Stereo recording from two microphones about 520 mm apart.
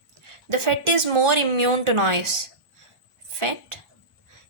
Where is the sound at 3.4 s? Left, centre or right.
Right.